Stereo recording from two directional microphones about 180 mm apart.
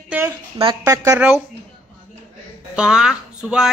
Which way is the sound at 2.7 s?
5° right (ahead or behind).